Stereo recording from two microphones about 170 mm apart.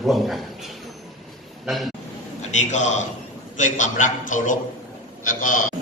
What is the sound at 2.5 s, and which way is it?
A man's voice, 45° left (ahead or behind).